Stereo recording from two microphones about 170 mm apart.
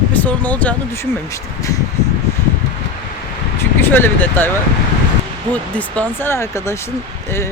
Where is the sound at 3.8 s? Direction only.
10° left (ahead or behind).